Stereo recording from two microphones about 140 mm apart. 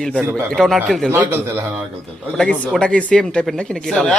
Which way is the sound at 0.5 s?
5° left (ahead or behind).